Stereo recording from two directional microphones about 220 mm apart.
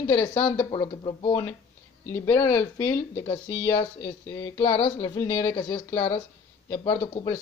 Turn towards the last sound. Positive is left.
turn(degrees=20)  # may be behind; listen again after turning